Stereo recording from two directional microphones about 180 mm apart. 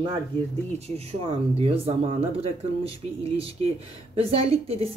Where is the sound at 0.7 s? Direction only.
35° right (ahead or behind).